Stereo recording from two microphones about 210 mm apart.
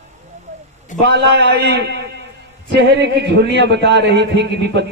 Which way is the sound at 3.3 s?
55° right (ahead or behind).